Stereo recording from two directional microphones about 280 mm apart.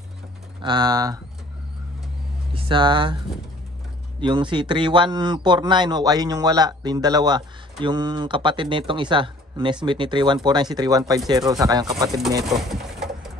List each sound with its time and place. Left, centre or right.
0.6 s a man's voice: centre
2.5 s speech: centre
4.2 s a man's voice: centre
12.4 s pigeon: centre